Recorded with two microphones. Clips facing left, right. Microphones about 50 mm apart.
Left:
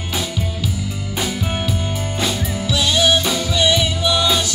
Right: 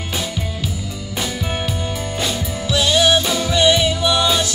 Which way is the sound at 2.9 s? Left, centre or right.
Centre.